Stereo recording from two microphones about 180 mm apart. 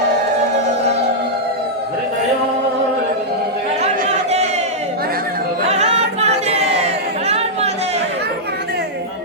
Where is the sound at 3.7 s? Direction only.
45° right (ahead or behind).